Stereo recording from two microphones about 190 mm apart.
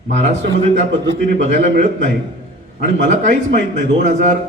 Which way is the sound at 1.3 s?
50° right (ahead or behind).